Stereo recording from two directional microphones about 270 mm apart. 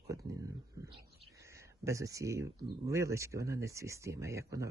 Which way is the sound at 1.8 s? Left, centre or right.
Centre.